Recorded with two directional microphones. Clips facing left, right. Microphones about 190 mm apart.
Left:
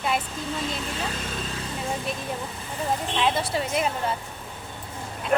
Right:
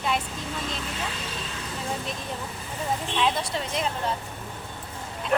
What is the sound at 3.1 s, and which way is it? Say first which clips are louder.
Speech: left 1 dB; 5° left (ahead or behind).